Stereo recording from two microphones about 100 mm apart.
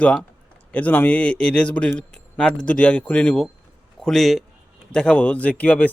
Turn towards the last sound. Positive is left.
turn(degrees=15)  # may be behind; listen again after turning